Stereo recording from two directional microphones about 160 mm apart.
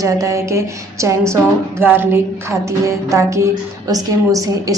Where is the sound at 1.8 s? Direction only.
15° right (ahead or behind).